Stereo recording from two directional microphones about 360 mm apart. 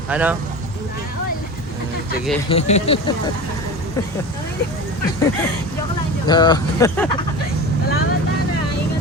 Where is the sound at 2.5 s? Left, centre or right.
Centre.